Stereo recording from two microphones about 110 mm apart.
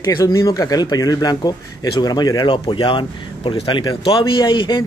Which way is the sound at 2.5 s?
50° left (ahead or behind).